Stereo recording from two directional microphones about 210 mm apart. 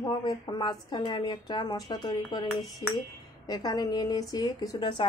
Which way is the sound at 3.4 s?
20° left (ahead or behind).